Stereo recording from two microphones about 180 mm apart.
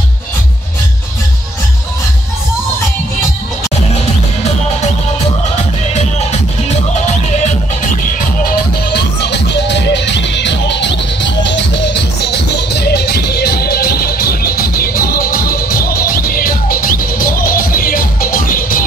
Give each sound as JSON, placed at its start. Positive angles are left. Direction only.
{"t": 8.5, "sound": "music", "side_deg": 65}